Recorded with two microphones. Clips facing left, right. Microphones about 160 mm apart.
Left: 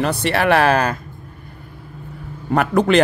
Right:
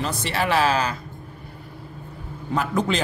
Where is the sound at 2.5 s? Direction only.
65° left (ahead or behind).